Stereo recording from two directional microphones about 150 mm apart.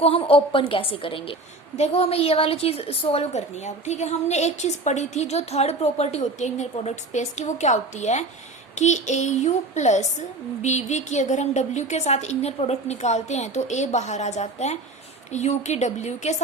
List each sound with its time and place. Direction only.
0.0 s a woman's voice: 40° left (ahead or behind)